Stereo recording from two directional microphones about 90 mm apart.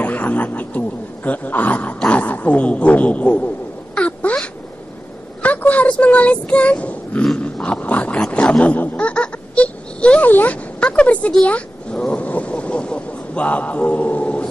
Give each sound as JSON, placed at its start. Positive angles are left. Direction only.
{"t": 0.0, "sound": "wild animals", "side_deg": 15}
{"t": 5.4, "sound": "grunt", "side_deg": 15}
{"t": 7.2, "sound": "roaring cats", "side_deg": 5}